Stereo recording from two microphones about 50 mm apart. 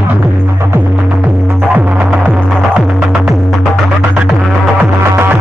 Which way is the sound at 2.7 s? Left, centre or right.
Centre.